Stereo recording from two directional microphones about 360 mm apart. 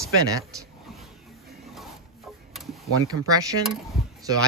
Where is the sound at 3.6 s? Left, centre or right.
Centre.